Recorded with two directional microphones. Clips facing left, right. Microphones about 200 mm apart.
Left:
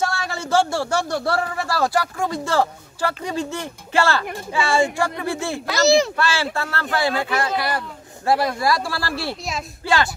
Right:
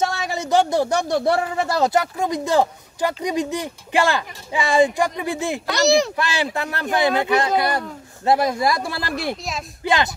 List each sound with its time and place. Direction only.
0.0 s a man's voice: 20° right (ahead or behind)
5.7 s speech: centre (ahead or behind)
6.1 s a man's voice: 15° right (ahead or behind)